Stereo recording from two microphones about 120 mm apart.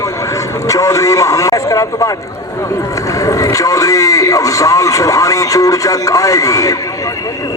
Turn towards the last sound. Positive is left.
turn(degrees=30)  # may be behind; listen again after turning